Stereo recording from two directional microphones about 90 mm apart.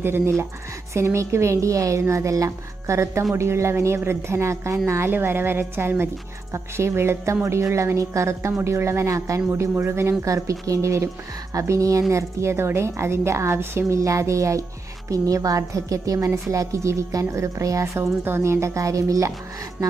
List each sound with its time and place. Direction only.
0.0 s a woman's voice: 25° right (ahead or behind)
17.9 s a woman's voice: 25° right (ahead or behind)